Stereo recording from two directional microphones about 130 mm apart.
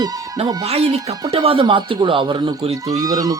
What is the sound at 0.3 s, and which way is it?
Speech, 55° right (ahead or behind).